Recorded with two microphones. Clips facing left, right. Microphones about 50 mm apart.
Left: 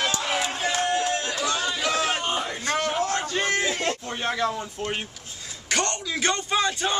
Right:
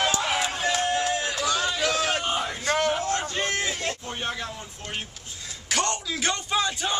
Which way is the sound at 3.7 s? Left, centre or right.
Left.